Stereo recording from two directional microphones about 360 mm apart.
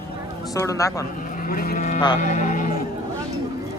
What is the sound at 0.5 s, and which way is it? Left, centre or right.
Speech, centre.